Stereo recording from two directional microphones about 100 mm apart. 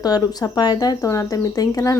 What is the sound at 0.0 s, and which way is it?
A woman's voice, 40° left (ahead or behind).